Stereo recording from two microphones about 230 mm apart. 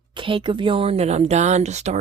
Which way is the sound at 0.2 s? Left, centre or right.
Right.